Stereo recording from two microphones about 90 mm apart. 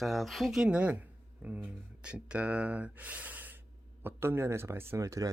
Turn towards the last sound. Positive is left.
turn(degrees=-40)  # may be behind; listen again after turning